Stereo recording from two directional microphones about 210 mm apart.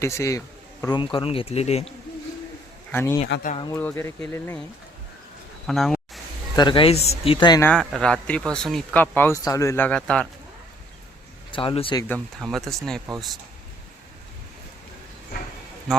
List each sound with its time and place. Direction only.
0.0 s speech: 15° left (ahead or behind); by 1.9 s 30° left (ahead or behind)
2.9 s speech: 10° left (ahead or behind)
5.6 s speech: centre (ahead or behind)
6.6 s speech: 20° left (ahead or behind)
7.6 s speech: 5° left (ahead or behind)
11.5 s speech: 25° left (ahead or behind)
12.0 s speech: 5° left (ahead or behind)